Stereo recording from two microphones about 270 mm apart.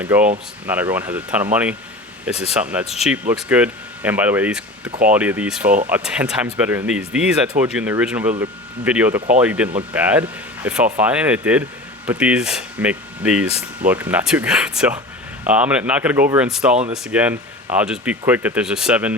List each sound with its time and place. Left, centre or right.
0.0 s speech: centre